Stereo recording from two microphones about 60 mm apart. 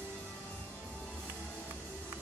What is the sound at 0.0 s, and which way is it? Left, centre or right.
Music, left.